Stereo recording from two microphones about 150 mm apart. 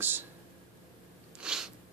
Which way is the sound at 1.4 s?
5° right (ahead or behind).